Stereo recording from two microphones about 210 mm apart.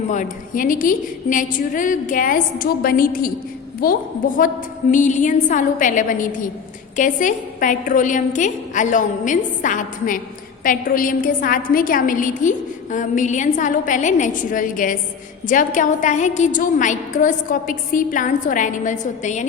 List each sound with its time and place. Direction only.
0.1 s a woman's voice: 40° left (ahead or behind)